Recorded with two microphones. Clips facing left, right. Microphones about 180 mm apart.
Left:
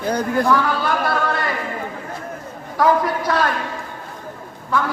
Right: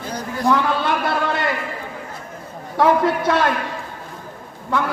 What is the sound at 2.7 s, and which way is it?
Speech, 25° right (ahead or behind).